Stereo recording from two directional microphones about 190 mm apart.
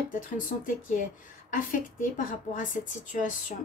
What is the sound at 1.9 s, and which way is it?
Speech, 45° left (ahead or behind).